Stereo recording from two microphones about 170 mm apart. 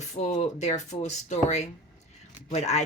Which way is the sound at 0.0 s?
45° left (ahead or behind).